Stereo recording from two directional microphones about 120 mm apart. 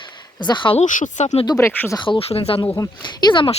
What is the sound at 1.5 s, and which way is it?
Speech, 25° left (ahead or behind).